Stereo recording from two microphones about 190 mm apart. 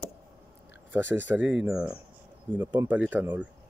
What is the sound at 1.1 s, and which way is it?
Speech, 10° right (ahead or behind).